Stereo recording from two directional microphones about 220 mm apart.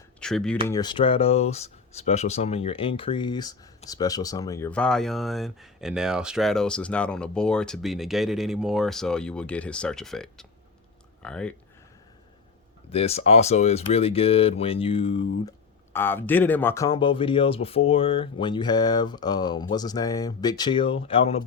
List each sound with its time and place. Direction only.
0.2 s speech: 5° left (ahead or behind)
0.7 s speech: 20° left (ahead or behind)
12.9 s speech: 30° left (ahead or behind)
15.4 s speech: 10° left (ahead or behind)